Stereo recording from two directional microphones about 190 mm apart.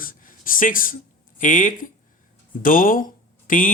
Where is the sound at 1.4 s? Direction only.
45° left (ahead or behind).